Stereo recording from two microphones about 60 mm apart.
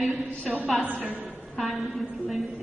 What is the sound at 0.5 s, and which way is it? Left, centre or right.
A woman's voice, centre.